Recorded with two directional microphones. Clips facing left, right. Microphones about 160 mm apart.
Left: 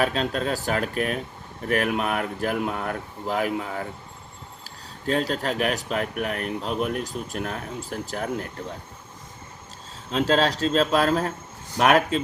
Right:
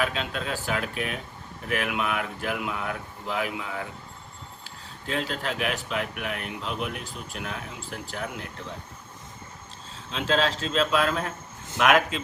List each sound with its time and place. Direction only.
0.0 s speech: 40° left (ahead or behind)
5.0 s speech: 40° left (ahead or behind)
10.1 s speech: 40° left (ahead or behind)